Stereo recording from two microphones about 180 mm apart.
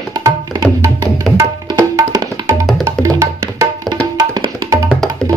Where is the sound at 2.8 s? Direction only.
20° right (ahead or behind).